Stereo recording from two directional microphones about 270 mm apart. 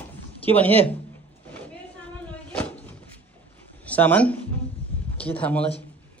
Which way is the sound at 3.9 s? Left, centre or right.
Centre.